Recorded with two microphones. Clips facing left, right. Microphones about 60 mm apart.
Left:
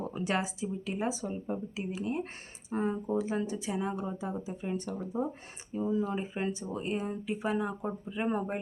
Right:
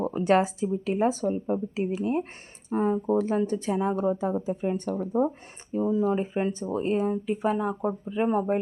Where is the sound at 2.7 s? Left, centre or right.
Centre.